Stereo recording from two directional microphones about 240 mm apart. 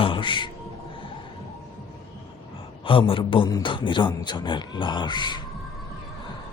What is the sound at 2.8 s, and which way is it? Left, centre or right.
A man's voice, left.